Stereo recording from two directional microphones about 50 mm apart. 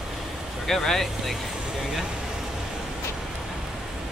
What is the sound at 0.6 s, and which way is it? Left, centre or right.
Speech, centre.